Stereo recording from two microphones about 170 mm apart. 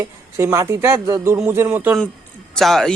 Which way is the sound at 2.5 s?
Centre (ahead or behind).